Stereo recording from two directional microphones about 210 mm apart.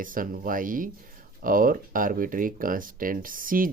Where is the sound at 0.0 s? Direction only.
40° right (ahead or behind).